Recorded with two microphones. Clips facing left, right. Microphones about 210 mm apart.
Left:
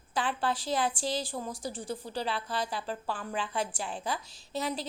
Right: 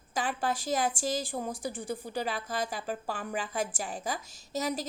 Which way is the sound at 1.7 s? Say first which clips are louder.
Right 1 dB; 10° right (ahead or behind).